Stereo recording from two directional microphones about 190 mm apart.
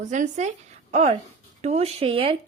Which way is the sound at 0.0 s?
40° right (ahead or behind).